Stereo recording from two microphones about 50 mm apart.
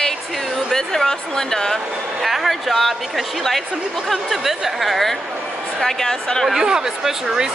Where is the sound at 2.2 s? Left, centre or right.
Centre.